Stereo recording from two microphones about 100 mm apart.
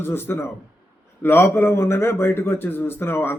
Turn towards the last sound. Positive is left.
turn(degrees=20)  # may be behind; listen again after turning